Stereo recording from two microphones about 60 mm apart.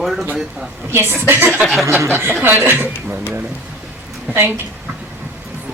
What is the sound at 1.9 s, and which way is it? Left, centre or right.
Speech, right.